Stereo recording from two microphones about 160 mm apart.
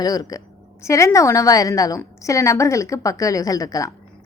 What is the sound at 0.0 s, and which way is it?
A woman's voice, 25° left (ahead or behind).